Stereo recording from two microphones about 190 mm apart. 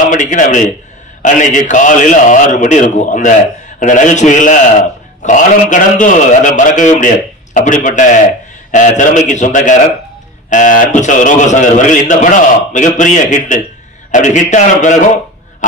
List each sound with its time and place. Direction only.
0.1 s a man's voice: 40° left (ahead or behind)